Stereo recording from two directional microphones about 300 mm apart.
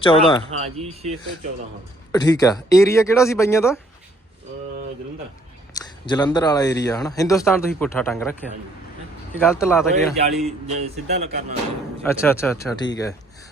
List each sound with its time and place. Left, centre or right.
0.0 s a man's voice: centre
0.6 s speech: right
2.1 s a man's voice: centre
5.7 s a man's voice: centre
9.4 s a man's voice: centre
10.7 s speech: right
12.0 s a man's voice: centre